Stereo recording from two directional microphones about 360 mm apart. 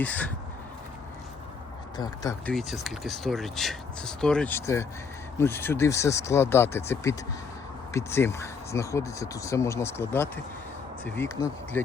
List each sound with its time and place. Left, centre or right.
0.0 s speech: centre
2.0 s speech: centre